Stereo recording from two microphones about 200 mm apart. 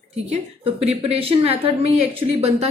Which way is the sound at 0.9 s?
30° right (ahead or behind).